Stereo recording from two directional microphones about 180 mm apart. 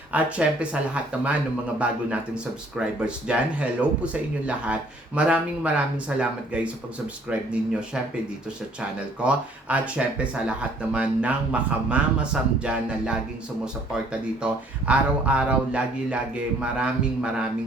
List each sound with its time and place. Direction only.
0.1 s speech: 5° right (ahead or behind)
1.8 s speech: 5° right (ahead or behind)
9.2 s speech: 5° right (ahead or behind)